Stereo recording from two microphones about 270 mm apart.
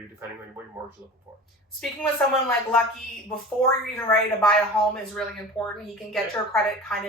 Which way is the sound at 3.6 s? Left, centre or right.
Centre.